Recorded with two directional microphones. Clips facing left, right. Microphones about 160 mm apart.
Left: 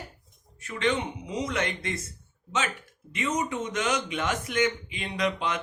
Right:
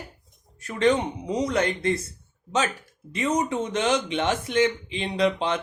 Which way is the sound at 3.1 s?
35° right (ahead or behind).